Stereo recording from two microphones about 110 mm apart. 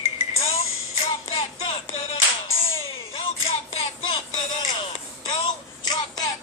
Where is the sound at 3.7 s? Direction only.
70° left (ahead or behind).